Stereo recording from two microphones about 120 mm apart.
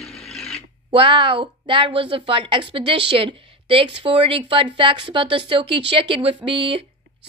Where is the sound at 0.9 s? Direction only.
45° right (ahead or behind).